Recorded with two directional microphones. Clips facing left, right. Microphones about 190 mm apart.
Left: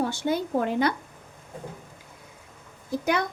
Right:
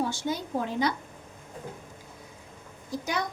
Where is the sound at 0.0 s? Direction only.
60° left (ahead or behind).